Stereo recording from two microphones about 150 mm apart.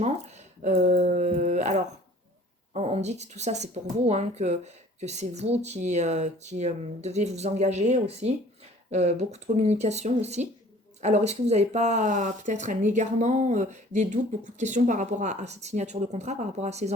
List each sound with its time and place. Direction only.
0.0 s speech: 50° right (ahead or behind)